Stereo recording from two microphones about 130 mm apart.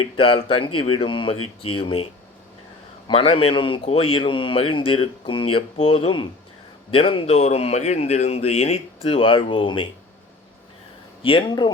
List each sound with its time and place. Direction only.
0.0 s a man's voice: 45° left (ahead or behind)
3.1 s a man's voice: 45° left (ahead or behind)
11.2 s speech: 40° left (ahead or behind)